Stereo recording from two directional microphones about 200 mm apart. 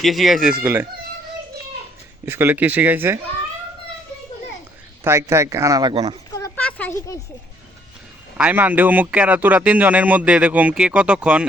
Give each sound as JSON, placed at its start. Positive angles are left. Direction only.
{"t": 0.0, "sound": "speech", "side_deg": 0}
{"t": 0.6, "sound": "a man's voice", "side_deg": -10}
{"t": 2.2, "sound": "a man's voice", "side_deg": -10}
{"t": 5.0, "sound": "a man's voice", "side_deg": -15}
{"t": 6.3, "sound": "a sound", "side_deg": 15}
{"t": 8.4, "sound": "a man's voice", "side_deg": -5}